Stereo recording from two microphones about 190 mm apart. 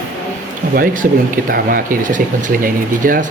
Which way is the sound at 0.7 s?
45° right (ahead or behind).